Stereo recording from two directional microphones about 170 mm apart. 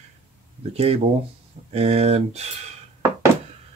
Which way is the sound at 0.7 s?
35° right (ahead or behind).